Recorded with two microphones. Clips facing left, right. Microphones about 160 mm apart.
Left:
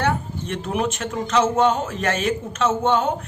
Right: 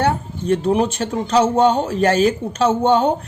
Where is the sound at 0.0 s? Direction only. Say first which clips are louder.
Right 4 dB; 35° right (ahead or behind).